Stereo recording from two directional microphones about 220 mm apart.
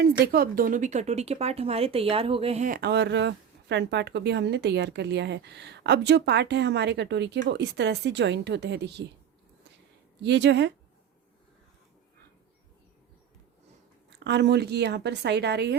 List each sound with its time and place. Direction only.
0.3 s speech: 45° right (ahead or behind)
10.2 s speech: 50° right (ahead or behind)
14.1 s speech: 50° right (ahead or behind)